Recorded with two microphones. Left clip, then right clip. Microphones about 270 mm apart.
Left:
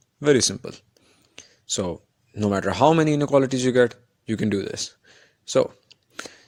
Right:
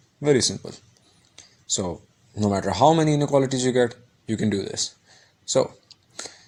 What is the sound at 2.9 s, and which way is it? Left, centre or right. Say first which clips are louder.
Speech: left 1 dB; left.